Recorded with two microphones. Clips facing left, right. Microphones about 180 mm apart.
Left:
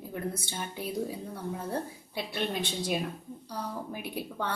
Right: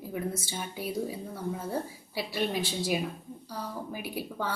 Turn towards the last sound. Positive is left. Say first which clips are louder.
# even
turn(degrees=-5)  # may be behind; listen again after turning